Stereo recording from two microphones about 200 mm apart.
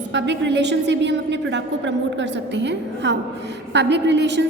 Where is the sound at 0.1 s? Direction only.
60° right (ahead or behind).